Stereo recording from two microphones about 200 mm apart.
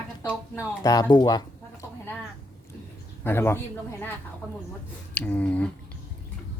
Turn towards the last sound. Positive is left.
turn(degrees=5)  # may be behind; listen again after turning